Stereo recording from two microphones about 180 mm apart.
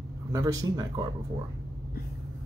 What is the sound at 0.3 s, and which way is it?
Speech, 20° right (ahead or behind).